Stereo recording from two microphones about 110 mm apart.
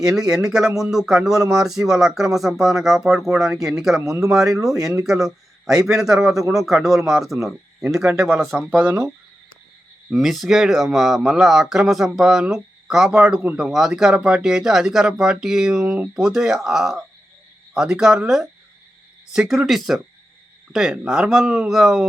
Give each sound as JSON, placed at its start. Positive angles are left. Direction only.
{"t": 0.0, "sound": "speech", "side_deg": -5}
{"t": 4.0, "sound": "speech", "side_deg": -30}
{"t": 5.0, "sound": "speech", "side_deg": -5}
{"t": 8.8, "sound": "speech", "side_deg": -20}
{"t": 10.1, "sound": "speech", "side_deg": 0}